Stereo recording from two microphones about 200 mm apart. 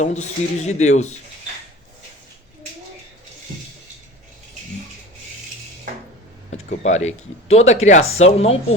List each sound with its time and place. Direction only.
0.0 s speech: 35° left (ahead or behind)
6.8 s speech: 35° left (ahead or behind)